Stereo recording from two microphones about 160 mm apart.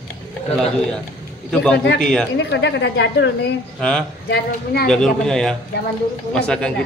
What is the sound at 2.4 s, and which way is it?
Speech, 90° left.